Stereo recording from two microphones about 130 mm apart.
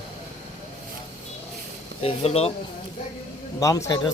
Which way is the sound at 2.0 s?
50° left (ahead or behind).